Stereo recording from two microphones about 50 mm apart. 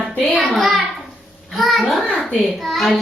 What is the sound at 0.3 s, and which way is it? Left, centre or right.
Speech, centre.